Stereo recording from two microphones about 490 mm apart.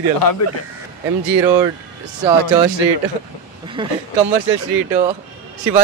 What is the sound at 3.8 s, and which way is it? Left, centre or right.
Speech, centre.